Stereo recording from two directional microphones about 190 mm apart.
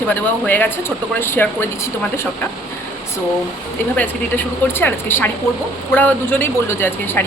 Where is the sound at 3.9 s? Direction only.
10° left (ahead or behind).